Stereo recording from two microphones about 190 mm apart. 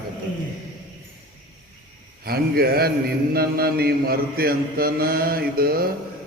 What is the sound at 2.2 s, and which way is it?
Mantra, 55° right (ahead or behind).